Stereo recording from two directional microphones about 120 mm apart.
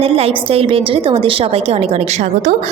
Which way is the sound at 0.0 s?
55° right (ahead or behind).